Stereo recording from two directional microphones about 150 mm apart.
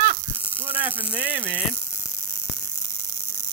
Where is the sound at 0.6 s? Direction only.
10° right (ahead or behind).